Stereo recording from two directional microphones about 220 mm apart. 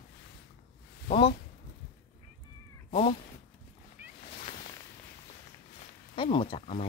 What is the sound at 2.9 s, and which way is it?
Speech, 30° left (ahead or behind).